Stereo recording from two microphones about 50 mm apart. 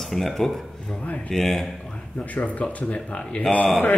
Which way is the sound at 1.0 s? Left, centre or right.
Left.